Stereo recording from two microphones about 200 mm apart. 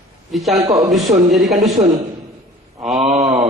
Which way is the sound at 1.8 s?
20° right (ahead or behind).